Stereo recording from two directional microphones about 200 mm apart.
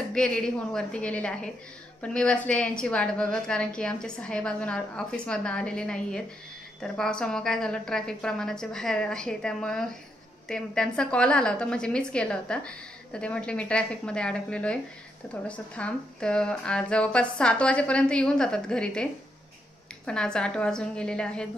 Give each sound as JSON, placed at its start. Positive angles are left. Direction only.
{"t": 0.1, "sound": "a woman's voice", "side_deg": 5}
{"t": 20.1, "sound": "a woman's voice", "side_deg": 5}